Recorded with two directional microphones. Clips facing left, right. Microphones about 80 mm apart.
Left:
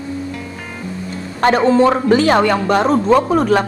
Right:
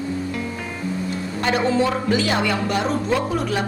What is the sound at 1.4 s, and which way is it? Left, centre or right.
Speech, left.